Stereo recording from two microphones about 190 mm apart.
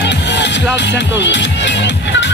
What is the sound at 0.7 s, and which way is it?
Speech, 65° left (ahead or behind).